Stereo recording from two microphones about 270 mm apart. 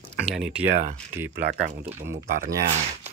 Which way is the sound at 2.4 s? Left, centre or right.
Right.